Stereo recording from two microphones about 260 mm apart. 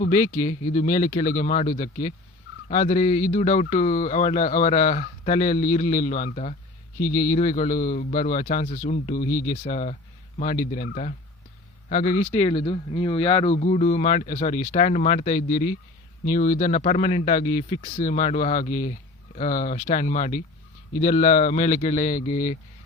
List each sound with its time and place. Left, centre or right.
0.0 s a man's voice: left
11.9 s speech: left